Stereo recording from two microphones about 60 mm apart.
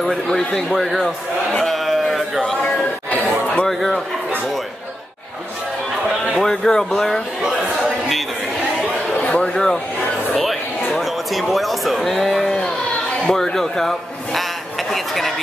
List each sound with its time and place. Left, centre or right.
0.3 s speech: centre
1.6 s a sound: centre
2.4 s speech: centre
3.1 s chuckle: left
3.6 s speech: centre
6.4 s speech: centre
6.9 s speech: centre
9.3 s speech: centre
11.0 s speech: centre
12.4 s a sound: centre
13.3 s a woman's voice: centre